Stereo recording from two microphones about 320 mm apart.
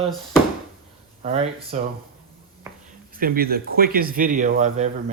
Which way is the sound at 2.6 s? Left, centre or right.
Centre.